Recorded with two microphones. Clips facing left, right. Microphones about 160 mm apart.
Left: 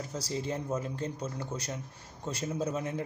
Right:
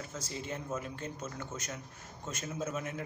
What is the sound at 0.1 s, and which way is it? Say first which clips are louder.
A man's voice: left 8 dB; 35° left (ahead or behind).